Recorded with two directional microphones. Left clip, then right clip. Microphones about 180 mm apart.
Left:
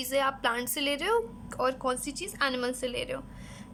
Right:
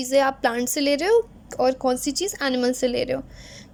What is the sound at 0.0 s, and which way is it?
A woman's voice, 25° right (ahead or behind).